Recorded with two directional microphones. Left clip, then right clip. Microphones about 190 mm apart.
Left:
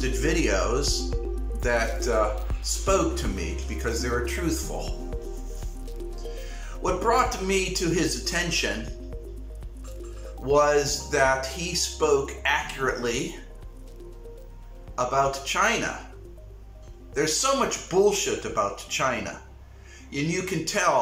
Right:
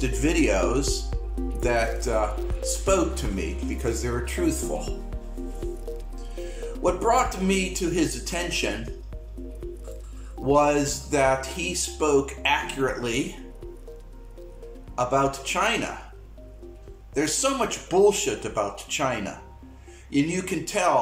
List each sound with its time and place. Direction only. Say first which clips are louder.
0.0 s speech: right 2 dB; 15° right (ahead or behind)
6.8 s speech: right 1 dB; 15° right (ahead or behind)
10.4 s speech: even; 15° right (ahead or behind)
15.0 s speech: right 1 dB; 15° right (ahead or behind)
17.1 s speech: left 1 dB; 15° right (ahead or behind)